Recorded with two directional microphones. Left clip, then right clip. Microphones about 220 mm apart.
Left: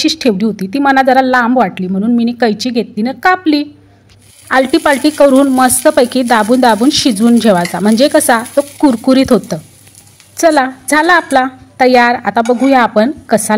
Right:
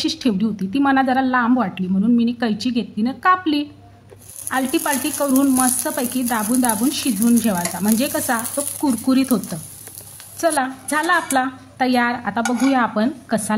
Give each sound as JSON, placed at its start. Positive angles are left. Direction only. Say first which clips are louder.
{"t": 0.0, "sound": "speech", "louder": "left 9 dB", "side_deg": 30}